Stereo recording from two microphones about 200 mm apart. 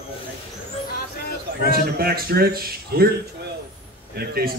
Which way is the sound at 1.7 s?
50° right (ahead or behind).